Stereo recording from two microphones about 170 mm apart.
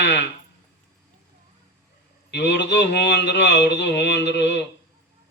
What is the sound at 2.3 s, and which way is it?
A man's voice, 90° left.